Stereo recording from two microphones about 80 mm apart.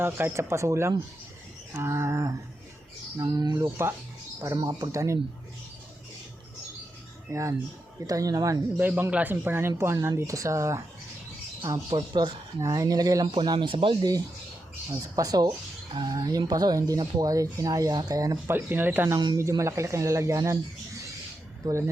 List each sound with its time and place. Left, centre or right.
0.0 s speech: right
3.2 s speech: right
7.3 s speech: right
8.8 s speech: right
11.9 s speech: right
12.6 s speech: right
13.3 s speech: right
15.1 s speech: right
18.4 s speech: right
19.4 s speech: right
21.6 s speech: right